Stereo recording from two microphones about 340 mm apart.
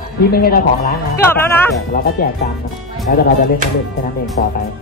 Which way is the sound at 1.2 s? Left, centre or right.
Centre.